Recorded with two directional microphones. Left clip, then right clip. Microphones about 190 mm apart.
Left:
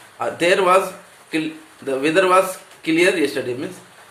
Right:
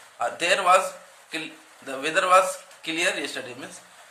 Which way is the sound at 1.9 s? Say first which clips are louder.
Left 4 dB; 20° right (ahead or behind).